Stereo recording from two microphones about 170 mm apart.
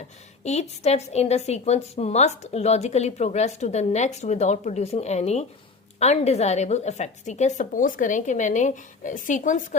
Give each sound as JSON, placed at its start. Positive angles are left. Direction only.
{"t": 0.4, "sound": "a woman's voice", "side_deg": 40}